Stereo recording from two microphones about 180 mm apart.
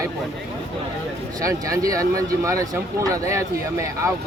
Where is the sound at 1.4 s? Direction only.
20° right (ahead or behind).